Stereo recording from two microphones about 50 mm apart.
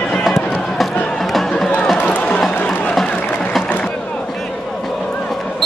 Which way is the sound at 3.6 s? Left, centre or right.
Left.